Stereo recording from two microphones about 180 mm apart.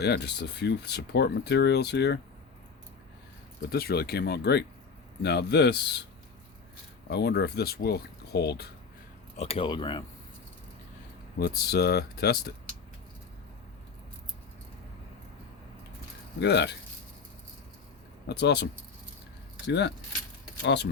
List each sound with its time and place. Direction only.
0.0 s speech: 70° left (ahead or behind)
3.7 s speech: 60° left (ahead or behind)
7.1 s speech: 65° left (ahead or behind)
9.4 s speech: 30° left (ahead or behind)
11.3 s speech: 60° left (ahead or behind)
16.4 s speech: 70° left (ahead or behind)
18.3 s speech: 70° left (ahead or behind)
19.6 s speech: 70° left (ahead or behind)